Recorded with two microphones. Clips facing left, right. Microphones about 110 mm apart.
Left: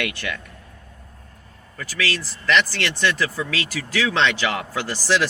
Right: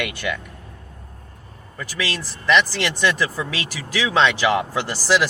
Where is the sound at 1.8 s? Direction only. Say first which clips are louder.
Left 1 dB; 15° right (ahead or behind).